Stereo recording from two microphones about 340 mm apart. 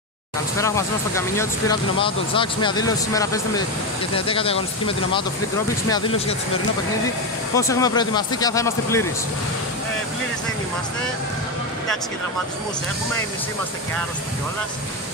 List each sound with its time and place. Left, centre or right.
0.6 s speech: centre
7.5 s speech: centre